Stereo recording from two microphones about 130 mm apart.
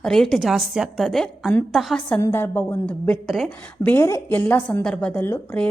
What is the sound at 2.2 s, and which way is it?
Speech, 20° left (ahead or behind).